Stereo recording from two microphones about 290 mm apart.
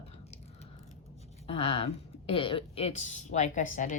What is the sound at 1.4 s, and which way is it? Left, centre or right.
Speech, centre.